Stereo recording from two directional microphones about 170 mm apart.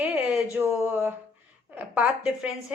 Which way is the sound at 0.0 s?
10° right (ahead or behind).